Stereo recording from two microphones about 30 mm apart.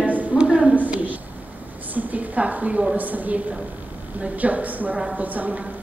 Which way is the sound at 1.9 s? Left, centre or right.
Right.